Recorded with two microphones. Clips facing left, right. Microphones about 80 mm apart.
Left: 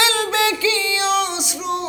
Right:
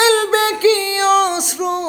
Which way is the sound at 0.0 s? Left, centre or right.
Right.